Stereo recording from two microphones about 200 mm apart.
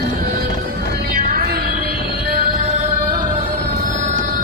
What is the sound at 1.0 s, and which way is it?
Music, 50° right (ahead or behind).